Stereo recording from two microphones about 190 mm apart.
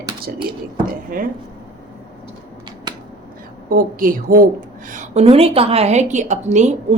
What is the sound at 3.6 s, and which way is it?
A woman's voice, 50° right (ahead or behind).